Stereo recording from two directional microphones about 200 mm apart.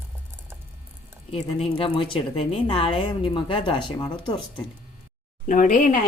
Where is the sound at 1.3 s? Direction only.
30° left (ahead or behind).